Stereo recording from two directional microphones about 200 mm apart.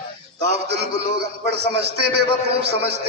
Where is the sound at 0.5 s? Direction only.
55° right (ahead or behind).